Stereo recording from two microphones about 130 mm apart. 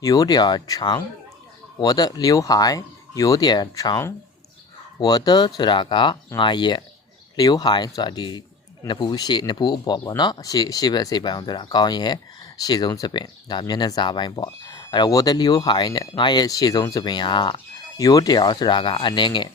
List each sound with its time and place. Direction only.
0.0 s speech: 30° left (ahead or behind)